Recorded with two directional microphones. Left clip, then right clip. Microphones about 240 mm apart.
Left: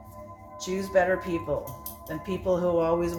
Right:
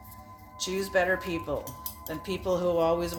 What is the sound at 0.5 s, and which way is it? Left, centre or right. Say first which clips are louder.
Speech: left 3 dB; right.